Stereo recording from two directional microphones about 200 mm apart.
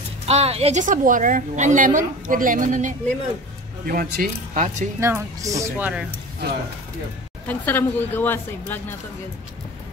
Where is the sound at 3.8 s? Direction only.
50° right (ahead or behind).